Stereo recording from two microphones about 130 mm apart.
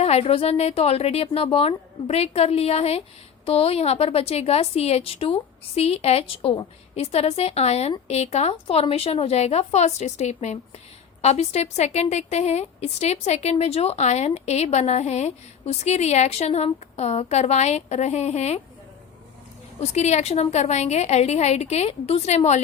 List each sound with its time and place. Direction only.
0.0 s a woman's voice: 50° left (ahead or behind)
19.8 s a woman's voice: 60° left (ahead or behind)